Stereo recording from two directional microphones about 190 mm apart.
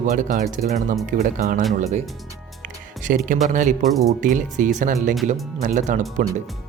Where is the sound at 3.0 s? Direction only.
45° right (ahead or behind).